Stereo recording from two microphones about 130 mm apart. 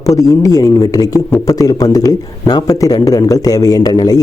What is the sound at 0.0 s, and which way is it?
A man's voice, 25° left (ahead or behind).